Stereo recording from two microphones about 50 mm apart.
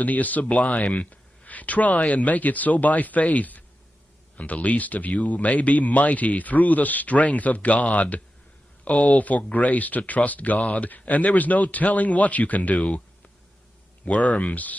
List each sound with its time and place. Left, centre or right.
0.0 s speech: left
14.0 s speech: left